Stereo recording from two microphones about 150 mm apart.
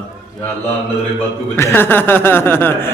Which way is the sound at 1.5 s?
15° left (ahead or behind).